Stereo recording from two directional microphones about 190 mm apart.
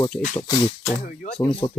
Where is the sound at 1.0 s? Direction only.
45° left (ahead or behind).